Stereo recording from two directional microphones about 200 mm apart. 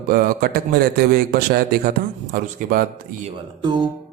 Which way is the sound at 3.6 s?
20° right (ahead or behind).